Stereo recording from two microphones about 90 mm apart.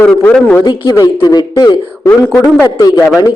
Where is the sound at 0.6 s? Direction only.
45° left (ahead or behind).